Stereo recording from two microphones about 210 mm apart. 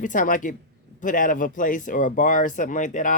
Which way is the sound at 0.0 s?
40° left (ahead or behind).